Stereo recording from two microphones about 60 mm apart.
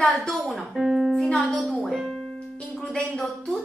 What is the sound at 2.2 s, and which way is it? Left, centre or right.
Music, centre.